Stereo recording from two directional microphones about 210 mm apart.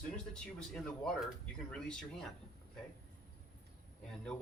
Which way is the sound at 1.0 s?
Centre (ahead or behind).